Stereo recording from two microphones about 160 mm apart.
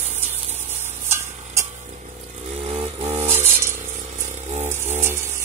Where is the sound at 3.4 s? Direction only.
15° right (ahead or behind).